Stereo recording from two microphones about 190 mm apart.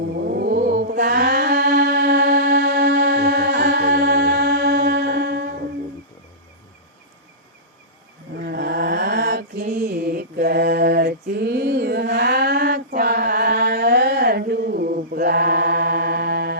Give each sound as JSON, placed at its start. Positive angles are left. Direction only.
{"t": 0.3, "sound": "mantra", "side_deg": -55}
{"t": 8.4, "sound": "mantra", "side_deg": -60}